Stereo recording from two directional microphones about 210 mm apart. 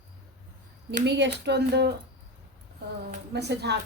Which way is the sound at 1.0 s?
55° right (ahead or behind).